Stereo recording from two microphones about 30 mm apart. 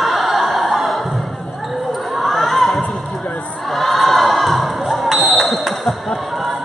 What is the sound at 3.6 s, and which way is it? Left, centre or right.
Crowd, centre.